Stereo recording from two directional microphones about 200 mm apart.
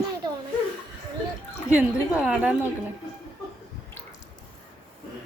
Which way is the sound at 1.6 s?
10° right (ahead or behind).